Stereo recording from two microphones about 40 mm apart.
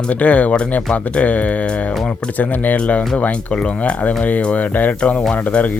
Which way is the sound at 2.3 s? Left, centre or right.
Left.